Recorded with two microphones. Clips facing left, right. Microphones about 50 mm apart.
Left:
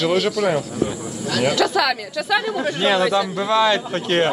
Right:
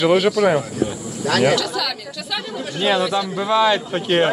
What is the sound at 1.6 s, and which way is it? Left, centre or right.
Speech, left.